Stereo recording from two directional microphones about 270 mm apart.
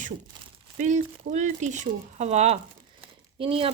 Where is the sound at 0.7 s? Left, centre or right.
Right.